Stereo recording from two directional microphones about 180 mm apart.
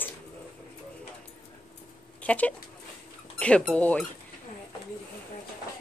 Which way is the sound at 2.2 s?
10° left (ahead or behind).